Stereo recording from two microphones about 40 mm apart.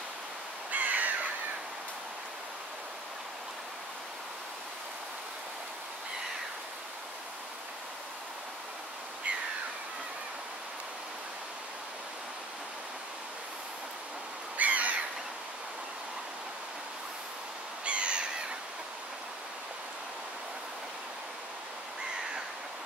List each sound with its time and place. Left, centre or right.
0.7 s crow: right
14.6 s bird: right
17.8 s owl: right